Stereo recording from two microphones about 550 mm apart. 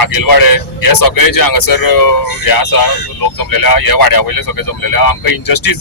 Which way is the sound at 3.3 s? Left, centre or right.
Left.